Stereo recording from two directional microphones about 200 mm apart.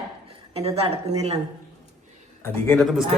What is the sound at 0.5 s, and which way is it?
Speech, 30° right (ahead or behind).